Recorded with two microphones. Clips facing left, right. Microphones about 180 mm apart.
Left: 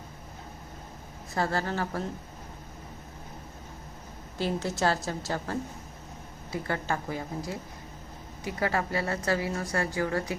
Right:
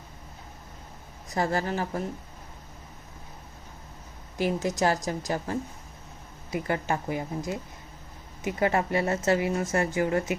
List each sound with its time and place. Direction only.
1.3 s a woman's voice: 15° right (ahead or behind)
4.4 s a woman's voice: 15° right (ahead or behind)